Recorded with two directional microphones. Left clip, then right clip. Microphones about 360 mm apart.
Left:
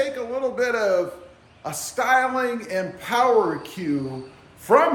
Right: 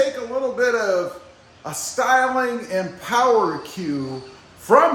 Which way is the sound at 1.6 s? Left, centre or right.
Centre.